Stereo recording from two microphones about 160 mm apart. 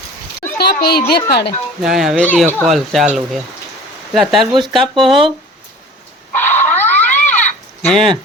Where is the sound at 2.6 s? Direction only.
Centre (ahead or behind).